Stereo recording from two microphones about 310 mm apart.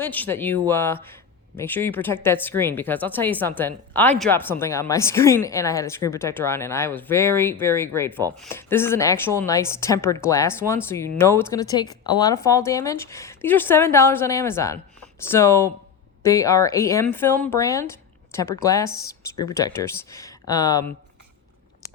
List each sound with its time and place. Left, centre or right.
0.0 s a woman's voice: centre